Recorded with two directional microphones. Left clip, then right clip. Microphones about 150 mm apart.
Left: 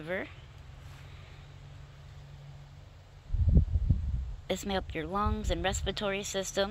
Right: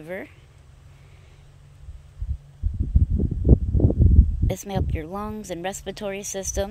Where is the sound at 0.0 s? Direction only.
30° right (ahead or behind).